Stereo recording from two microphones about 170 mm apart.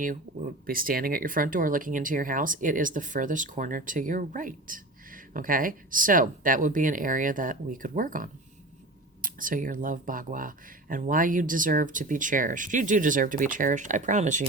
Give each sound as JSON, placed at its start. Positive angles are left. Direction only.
{"t": 0.7, "sound": "speech", "side_deg": -55}